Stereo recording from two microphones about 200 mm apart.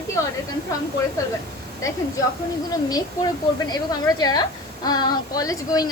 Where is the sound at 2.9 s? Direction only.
20° left (ahead or behind).